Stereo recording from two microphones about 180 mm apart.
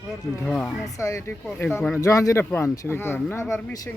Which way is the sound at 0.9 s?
15° left (ahead or behind).